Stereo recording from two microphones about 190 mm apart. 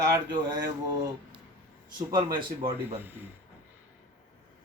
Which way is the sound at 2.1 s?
25° right (ahead or behind).